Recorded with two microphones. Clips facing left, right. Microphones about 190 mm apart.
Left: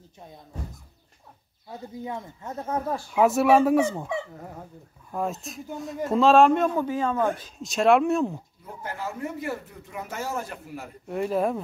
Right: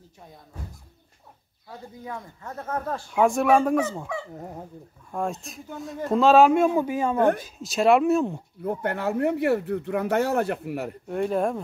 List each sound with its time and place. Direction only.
1.7 s speech: 20° left (ahead or behind); by 3.9 s 5° left (ahead or behind)
5.1 s a man's voice: centre (ahead or behind)
8.6 s speech: 65° right (ahead or behind)
11.1 s speech: centre (ahead or behind)